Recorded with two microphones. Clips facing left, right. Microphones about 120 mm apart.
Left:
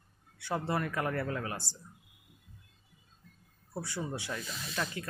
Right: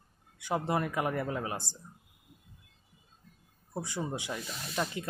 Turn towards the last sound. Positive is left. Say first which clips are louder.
# right 3 dB
turn(degrees=-20)  # may be behind; listen again after turning